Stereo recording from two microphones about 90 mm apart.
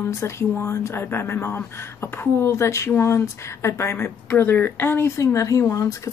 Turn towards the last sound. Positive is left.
turn(degrees=35)  # may be behind; listen again after turning